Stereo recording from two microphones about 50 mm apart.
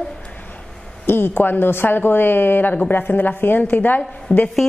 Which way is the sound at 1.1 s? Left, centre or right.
Left.